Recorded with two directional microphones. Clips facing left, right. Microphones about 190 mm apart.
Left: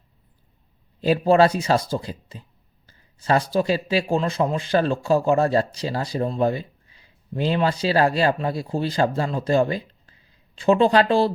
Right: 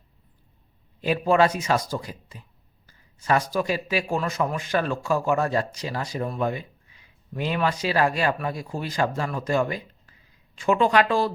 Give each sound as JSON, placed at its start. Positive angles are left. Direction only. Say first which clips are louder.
{"t": 1.0, "sound": "speech", "louder": "left 4 dB", "side_deg": 35}